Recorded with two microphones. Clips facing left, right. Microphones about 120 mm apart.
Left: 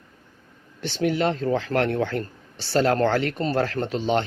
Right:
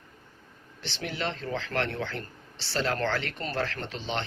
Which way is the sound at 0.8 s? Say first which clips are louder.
Left 11 dB; 45° left (ahead or behind).